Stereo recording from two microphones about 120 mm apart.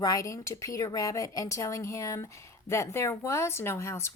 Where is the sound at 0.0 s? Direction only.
30° left (ahead or behind).